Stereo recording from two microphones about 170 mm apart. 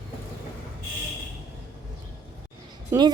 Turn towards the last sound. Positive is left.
turn(degrees=-25)  # may be behind; listen again after turning